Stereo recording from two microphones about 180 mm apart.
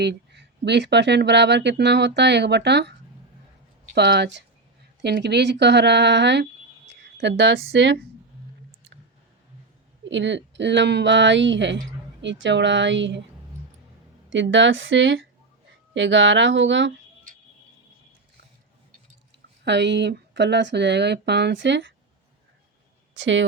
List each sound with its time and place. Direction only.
0.0 s speech: 70° right (ahead or behind)
3.9 s speech: 70° right (ahead or behind)
10.0 s speech: 90° right
14.3 s speech: 90° right
17.3 s music: 50° right (ahead or behind)
19.6 s speech: 75° right (ahead or behind)
23.1 s speech: 90° right